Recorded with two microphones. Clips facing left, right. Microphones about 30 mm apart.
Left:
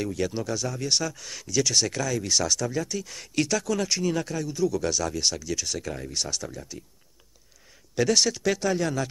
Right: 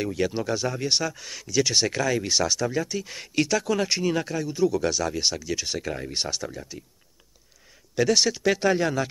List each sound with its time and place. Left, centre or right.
0.0 s speech: centre
6.4 s speech: centre
7.9 s speech: centre
8.5 s speech: right